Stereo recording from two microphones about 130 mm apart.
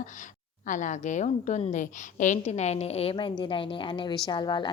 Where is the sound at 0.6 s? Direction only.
70° left (ahead or behind); by 3.1 s 50° left (ahead or behind).